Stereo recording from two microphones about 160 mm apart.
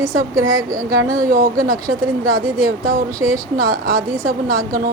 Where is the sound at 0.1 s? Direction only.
20° right (ahead or behind).